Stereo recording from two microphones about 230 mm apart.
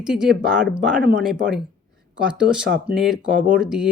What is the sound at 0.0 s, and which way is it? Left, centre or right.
Speech, centre.